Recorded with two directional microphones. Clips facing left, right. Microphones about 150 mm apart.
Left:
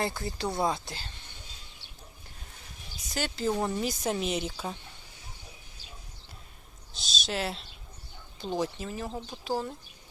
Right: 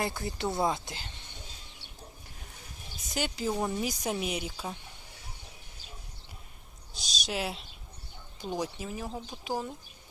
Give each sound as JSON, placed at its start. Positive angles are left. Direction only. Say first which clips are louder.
{"t": 0.0, "sound": "a woman's voice", "louder": "left 1 dB", "side_deg": -20}
{"t": 3.1, "sound": "speech", "louder": "left 2 dB", "side_deg": -15}
{"t": 6.9, "sound": "speech", "louder": "left 1 dB", "side_deg": -15}
{"t": 9.4, "sound": "speech", "louder": "left 3 dB", "side_deg": -15}